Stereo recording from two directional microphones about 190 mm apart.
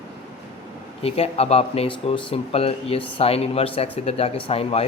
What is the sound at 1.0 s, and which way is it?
Speech, 30° left (ahead or behind).